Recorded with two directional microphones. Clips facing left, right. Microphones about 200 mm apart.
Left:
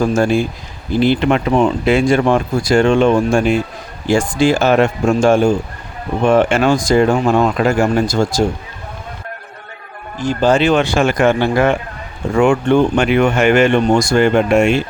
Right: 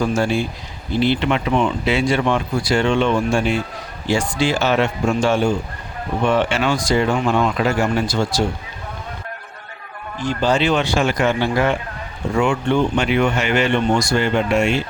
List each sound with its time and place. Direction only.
0.0 s speech: 50° left (ahead or behind)
10.2 s speech: 45° left (ahead or behind)